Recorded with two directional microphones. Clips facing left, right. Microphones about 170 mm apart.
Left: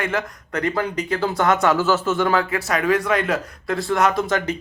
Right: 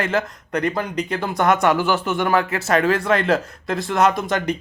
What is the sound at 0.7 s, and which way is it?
Speech, 20° right (ahead or behind).